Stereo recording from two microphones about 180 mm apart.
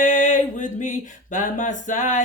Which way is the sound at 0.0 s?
45° left (ahead or behind).